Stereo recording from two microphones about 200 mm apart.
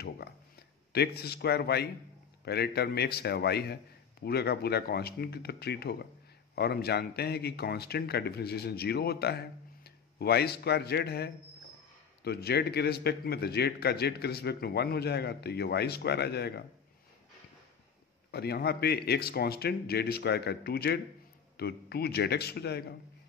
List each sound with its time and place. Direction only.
0.9 s a man's voice: 55° left (ahead or behind)
18.3 s a man's voice: 55° left (ahead or behind)